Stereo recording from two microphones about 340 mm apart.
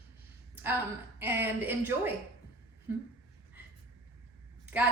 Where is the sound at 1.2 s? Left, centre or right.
Centre.